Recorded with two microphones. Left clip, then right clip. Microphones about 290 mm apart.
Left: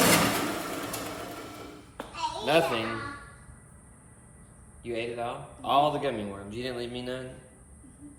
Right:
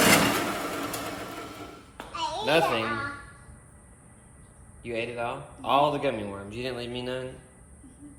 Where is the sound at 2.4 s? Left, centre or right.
Centre.